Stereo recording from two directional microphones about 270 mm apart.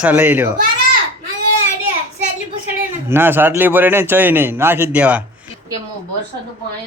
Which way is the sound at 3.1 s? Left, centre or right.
Centre.